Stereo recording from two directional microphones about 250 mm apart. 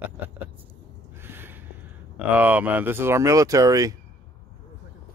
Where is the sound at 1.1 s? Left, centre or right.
Centre.